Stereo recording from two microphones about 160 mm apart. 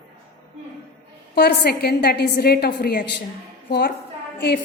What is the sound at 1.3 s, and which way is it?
A woman's voice, 85° left.